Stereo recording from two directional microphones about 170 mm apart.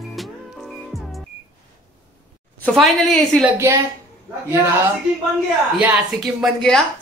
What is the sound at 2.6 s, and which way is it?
Speech, centre (ahead or behind).